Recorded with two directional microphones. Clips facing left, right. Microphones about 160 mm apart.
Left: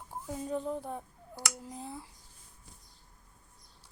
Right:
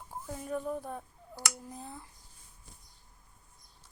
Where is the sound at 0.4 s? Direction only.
20° left (ahead or behind).